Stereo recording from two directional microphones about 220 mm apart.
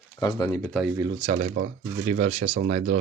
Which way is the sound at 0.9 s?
15° right (ahead or behind).